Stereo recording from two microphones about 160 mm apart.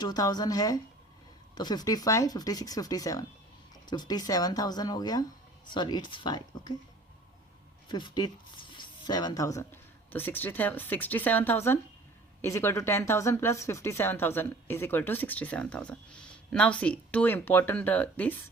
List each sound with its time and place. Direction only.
0.0 s speech: 25° left (ahead or behind)
7.9 s speech: 30° left (ahead or behind)
8.7 s a sound: 30° left (ahead or behind)
10.1 s speech: 10° left (ahead or behind)